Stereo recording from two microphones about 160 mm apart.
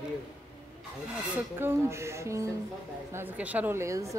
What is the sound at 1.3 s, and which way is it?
A woman's voice, 15° right (ahead or behind).